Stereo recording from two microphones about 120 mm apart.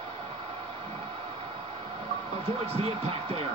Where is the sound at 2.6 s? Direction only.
55° right (ahead or behind).